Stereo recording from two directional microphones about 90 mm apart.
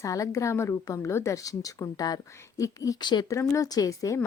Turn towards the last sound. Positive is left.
turn(degrees=45)  # may be behind; listen again after turning